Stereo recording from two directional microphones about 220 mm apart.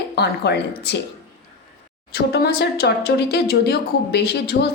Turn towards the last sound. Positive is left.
turn(degrees=45)  # may be behind; listen again after turning